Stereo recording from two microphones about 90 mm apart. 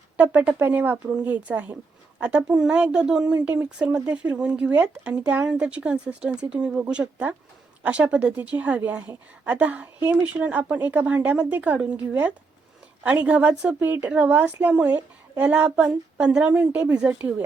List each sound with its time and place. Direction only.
0.2 s speech: 15° right (ahead or behind)